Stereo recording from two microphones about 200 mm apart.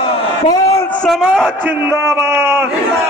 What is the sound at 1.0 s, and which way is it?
A man's voice, centre (ahead or behind).